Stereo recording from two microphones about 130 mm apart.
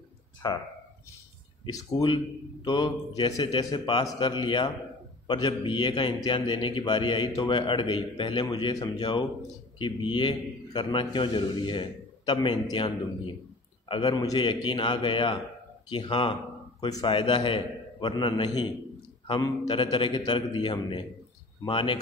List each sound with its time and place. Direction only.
0.4 s a man's voice: 30° left (ahead or behind)
1.7 s a man's voice: 30° left (ahead or behind)
19.8 s a man's voice: 40° left (ahead or behind)